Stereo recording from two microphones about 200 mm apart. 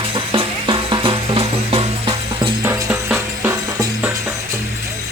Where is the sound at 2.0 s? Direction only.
15° right (ahead or behind).